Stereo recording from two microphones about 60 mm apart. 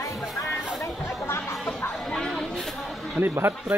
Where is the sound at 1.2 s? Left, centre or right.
Left.